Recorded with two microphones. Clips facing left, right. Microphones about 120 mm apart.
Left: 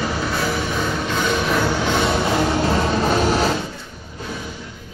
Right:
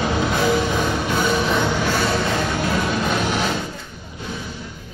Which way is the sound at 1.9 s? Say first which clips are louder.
Left 2 dB; 20° left (ahead or behind).